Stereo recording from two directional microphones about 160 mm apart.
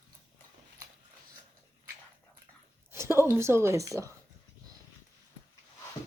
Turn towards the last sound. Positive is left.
turn(degrees=-20)  # may be behind; listen again after turning